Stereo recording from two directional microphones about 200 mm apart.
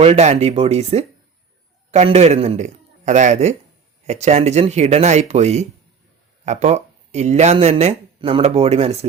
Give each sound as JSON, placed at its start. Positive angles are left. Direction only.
{"t": 0.0, "sound": "a man's voice", "side_deg": -35}